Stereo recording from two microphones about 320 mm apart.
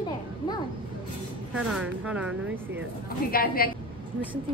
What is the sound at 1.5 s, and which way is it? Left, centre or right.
Speech, centre.